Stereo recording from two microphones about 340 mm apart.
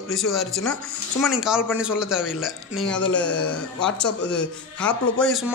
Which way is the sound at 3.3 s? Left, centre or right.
Left.